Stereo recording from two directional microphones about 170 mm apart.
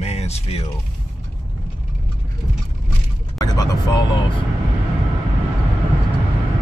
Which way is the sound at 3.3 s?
20° left (ahead or behind).